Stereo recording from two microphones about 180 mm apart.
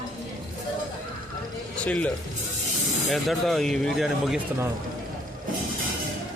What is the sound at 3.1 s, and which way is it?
Speech, centre (ahead or behind).